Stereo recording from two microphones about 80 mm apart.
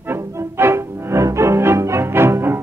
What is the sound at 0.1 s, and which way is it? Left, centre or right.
Music, right.